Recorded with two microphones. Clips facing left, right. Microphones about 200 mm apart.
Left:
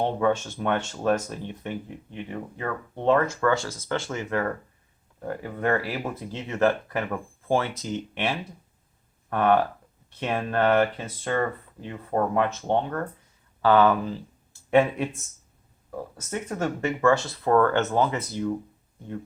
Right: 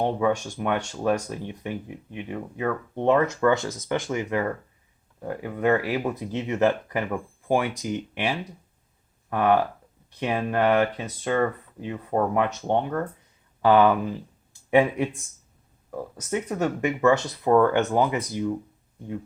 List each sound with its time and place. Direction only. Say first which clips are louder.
0.0 s speech: even; 10° right (ahead or behind)